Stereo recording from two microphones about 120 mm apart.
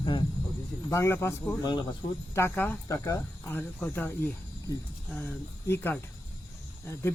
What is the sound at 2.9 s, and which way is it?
Speech, 30° left (ahead or behind).